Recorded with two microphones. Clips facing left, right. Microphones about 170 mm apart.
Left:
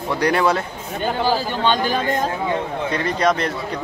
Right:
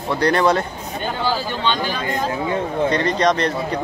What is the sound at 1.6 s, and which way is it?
Speech, 45° left (ahead or behind).